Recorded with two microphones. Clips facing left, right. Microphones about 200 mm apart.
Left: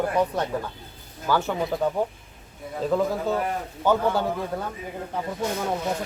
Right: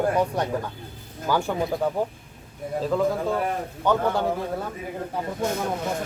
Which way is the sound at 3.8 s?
5° left (ahead or behind).